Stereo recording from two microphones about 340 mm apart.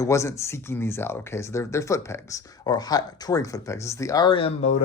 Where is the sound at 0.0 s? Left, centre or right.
Centre.